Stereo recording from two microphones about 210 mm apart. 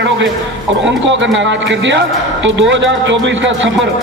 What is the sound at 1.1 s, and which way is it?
A man's voice, 60° right (ahead or behind).